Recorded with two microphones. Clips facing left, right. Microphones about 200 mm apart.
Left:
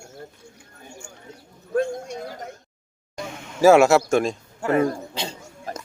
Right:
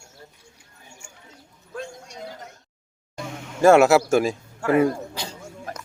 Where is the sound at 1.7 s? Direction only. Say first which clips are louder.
Left 12 dB; 55° left (ahead or behind).